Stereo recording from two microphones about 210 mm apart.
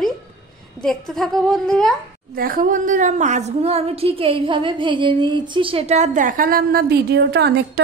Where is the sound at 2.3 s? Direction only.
45° right (ahead or behind).